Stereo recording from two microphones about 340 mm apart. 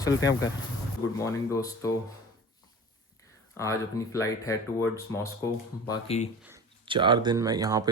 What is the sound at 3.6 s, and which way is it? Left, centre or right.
Speech, centre.